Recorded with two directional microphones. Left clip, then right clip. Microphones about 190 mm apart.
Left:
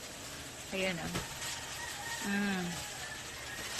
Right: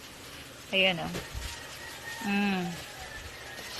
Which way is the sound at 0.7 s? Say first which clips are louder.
Right 11 dB; 25° right (ahead or behind).